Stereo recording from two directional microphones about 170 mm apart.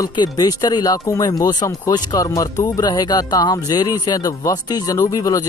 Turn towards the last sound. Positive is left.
turn(degrees=20)  # may be behind; listen again after turning